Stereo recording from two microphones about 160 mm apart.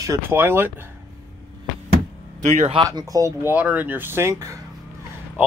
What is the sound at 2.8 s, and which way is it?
Speech, 20° right (ahead or behind).